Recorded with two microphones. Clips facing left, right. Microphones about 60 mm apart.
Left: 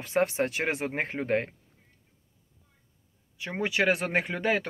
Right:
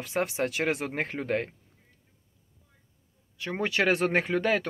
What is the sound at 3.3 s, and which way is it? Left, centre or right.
Speech, centre.